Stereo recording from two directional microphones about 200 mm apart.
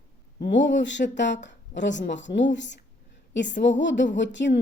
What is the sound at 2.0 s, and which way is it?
Speech, 65° left (ahead or behind).